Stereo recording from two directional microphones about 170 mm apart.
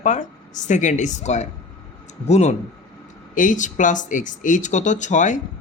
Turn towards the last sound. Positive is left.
turn(degrees=45)  # may be behind; listen again after turning